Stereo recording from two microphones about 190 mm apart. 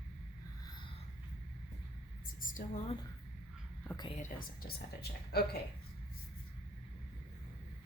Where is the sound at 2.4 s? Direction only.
45° left (ahead or behind).